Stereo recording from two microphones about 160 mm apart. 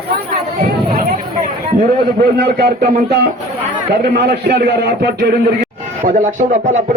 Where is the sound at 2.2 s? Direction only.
75° right (ahead or behind).